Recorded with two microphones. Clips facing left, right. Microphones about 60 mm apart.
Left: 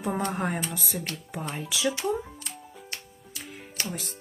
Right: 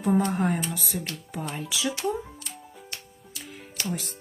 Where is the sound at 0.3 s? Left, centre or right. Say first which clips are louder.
Right 3 dB; centre.